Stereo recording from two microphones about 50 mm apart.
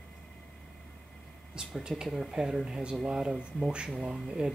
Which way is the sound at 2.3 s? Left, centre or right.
Centre.